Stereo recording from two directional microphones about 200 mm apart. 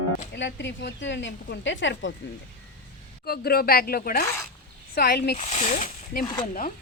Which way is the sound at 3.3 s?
50° left (ahead or behind).